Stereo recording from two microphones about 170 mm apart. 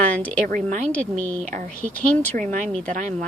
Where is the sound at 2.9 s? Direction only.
45° right (ahead or behind).